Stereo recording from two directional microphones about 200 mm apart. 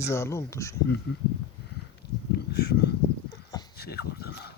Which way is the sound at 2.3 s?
55° left (ahead or behind).